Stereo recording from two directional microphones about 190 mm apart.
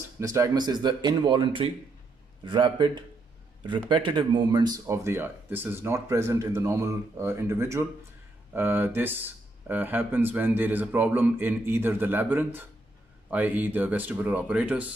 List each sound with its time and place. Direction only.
0.2 s speech: 20° right (ahead or behind)